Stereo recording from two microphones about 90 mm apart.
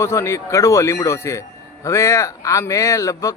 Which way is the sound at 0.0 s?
35° left (ahead or behind).